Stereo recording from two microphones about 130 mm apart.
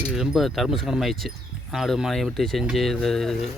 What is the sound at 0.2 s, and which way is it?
Speech, centre (ahead or behind).